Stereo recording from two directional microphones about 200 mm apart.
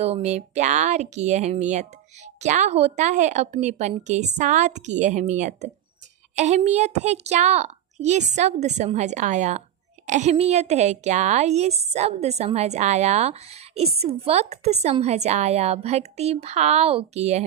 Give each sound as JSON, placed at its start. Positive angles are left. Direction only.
{"t": 0.0, "sound": "a woman's voice", "side_deg": -35}